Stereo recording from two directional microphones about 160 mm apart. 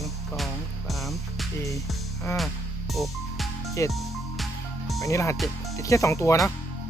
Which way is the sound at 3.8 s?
20° left (ahead or behind).